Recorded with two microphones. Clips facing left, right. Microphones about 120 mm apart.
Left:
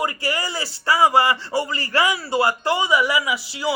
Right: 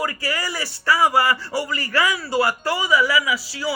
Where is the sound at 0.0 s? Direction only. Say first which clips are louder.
Left 1 dB; 25° left (ahead or behind).